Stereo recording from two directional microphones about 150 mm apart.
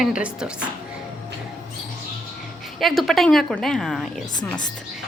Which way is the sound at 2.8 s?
Centre (ahead or behind).